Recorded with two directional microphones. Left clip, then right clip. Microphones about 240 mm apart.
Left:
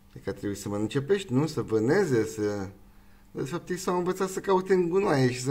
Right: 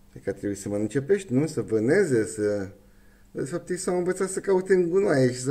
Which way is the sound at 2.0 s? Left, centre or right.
Centre.